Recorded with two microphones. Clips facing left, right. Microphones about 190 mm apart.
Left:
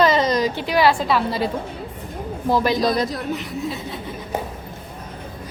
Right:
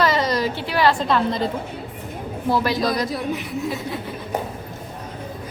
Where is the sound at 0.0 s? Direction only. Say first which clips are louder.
Left 3 dB; 20° left (ahead or behind).